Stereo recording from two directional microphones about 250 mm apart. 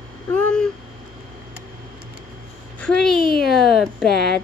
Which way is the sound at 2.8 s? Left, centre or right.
Centre.